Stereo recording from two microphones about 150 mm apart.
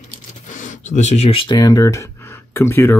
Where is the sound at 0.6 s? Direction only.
50° left (ahead or behind).